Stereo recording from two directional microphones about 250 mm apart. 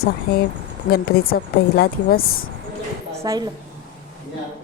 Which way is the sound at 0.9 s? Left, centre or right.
Left.